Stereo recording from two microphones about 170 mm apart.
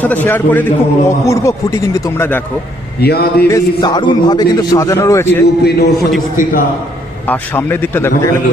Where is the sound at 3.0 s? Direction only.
70° left (ahead or behind).